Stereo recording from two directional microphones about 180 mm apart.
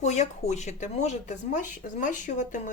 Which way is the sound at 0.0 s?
40° left (ahead or behind).